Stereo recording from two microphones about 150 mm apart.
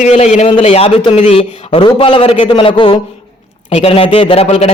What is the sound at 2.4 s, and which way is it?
A man's voice, 35° left (ahead or behind).